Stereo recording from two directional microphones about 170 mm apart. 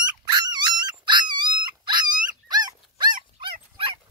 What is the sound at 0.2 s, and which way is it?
Dog, 25° right (ahead or behind).